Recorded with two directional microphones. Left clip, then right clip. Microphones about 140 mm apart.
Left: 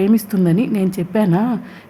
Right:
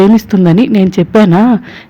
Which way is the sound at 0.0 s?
35° right (ahead or behind).